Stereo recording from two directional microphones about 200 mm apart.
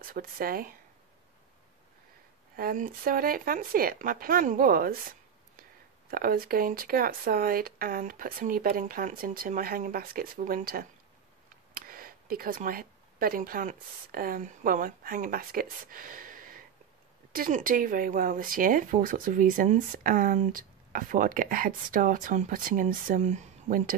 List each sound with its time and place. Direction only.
0.0 s speech: 45° right (ahead or behind)
2.5 s speech: 45° right (ahead or behind)
6.0 s speech: 45° right (ahead or behind)